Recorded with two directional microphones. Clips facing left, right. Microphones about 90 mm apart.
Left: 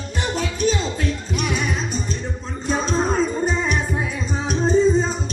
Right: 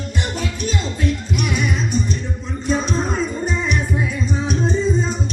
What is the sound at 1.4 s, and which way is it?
Music, 40° left (ahead or behind).